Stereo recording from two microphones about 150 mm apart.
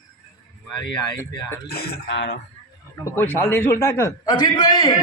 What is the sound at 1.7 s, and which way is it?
Speech, 90° left.